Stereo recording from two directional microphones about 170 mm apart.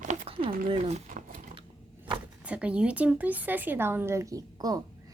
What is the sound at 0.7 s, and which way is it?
Speech, 40° right (ahead or behind).